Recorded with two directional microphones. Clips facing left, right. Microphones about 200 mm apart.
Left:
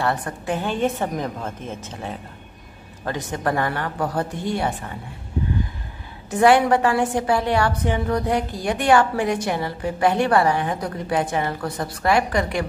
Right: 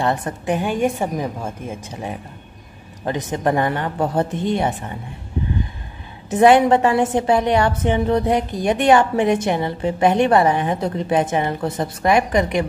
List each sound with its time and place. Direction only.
0.0 s a woman's voice: 20° right (ahead or behind)
6.3 s a woman's voice: 20° right (ahead or behind)